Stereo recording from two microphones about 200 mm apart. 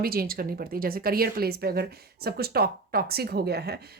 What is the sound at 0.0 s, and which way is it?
A woman's voice, 50° right (ahead or behind).